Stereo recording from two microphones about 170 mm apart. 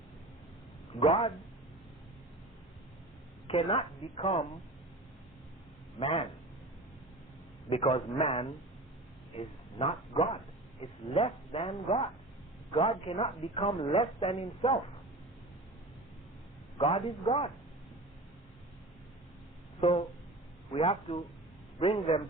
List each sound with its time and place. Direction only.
0.9 s speech: 35° left (ahead or behind)
3.4 s speech: 35° left (ahead or behind)
6.0 s speech: 35° left (ahead or behind)
7.7 s speech: 30° left (ahead or behind)
16.7 s speech: 35° left (ahead or behind)
19.8 s speech: 35° left (ahead or behind)